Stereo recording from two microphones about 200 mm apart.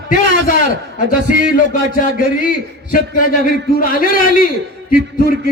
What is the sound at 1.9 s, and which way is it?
A man's voice, 45° left (ahead or behind).